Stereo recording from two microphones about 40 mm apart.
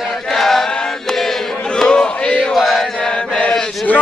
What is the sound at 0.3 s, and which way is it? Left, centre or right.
Chant, centre.